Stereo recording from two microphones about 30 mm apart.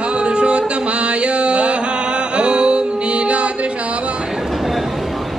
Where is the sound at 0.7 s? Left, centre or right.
Right.